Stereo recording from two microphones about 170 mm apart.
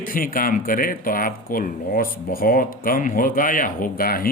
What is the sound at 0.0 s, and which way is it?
A man's voice, 55° left (ahead or behind).